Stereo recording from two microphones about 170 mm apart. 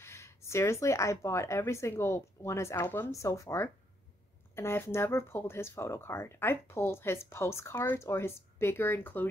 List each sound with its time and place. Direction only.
0.0 s speech: 15° left (ahead or behind)